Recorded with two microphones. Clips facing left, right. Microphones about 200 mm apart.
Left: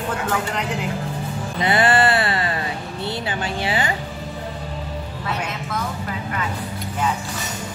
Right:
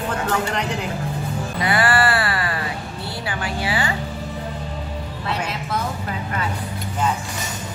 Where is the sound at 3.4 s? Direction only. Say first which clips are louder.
Right 1 dB; 25° left (ahead or behind).